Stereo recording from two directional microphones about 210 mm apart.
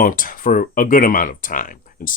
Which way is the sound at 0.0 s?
40° left (ahead or behind).